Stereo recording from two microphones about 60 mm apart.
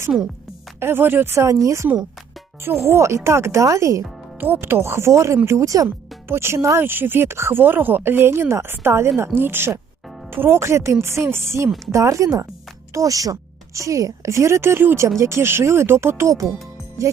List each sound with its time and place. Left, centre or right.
0.8 s speech: right
1.5 s speech: right
4.4 s speech: right
6.2 s speech: right
6.8 s speech: right
11.9 s a woman's voice: right